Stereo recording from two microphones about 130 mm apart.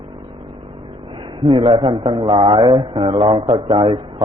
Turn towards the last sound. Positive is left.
turn(degrees=-40)  # may be behind; listen again after turning